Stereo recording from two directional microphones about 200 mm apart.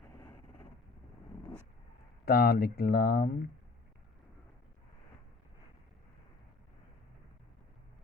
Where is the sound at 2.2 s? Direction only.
50° left (ahead or behind).